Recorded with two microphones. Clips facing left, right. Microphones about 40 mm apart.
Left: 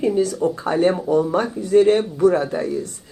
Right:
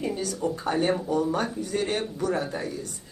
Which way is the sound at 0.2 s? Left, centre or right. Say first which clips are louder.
Left 9 dB; left.